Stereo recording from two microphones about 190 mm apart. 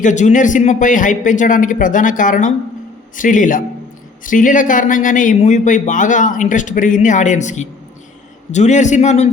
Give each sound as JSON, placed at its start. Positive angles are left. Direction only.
{"t": 0.0, "sound": "a man's voice", "side_deg": 40}